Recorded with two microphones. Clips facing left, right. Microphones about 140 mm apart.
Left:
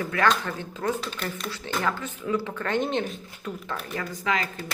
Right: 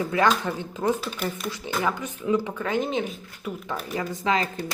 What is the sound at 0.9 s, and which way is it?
Speech, 10° right (ahead or behind).